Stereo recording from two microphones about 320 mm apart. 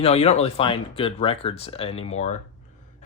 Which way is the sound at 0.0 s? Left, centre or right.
Centre.